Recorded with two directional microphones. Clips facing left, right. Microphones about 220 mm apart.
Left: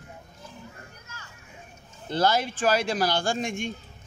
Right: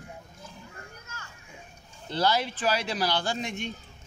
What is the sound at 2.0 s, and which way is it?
Speech, 50° left (ahead or behind).